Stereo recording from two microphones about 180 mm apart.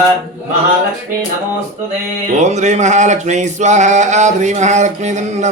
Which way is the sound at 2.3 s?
40° right (ahead or behind).